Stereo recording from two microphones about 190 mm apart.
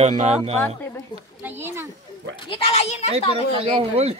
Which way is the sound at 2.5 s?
30° left (ahead or behind).